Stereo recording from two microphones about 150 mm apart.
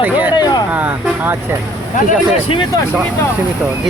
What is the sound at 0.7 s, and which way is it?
Speech, 10° right (ahead or behind).